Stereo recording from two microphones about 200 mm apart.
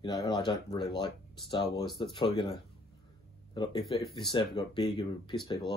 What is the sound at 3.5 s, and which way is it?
Speech, 25° left (ahead or behind).